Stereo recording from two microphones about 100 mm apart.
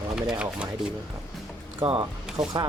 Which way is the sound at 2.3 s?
35° right (ahead or behind).